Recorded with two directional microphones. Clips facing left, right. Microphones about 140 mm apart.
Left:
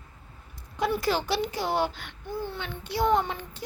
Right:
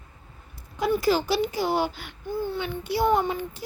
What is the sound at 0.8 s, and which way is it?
A child's voice, centre (ahead or behind).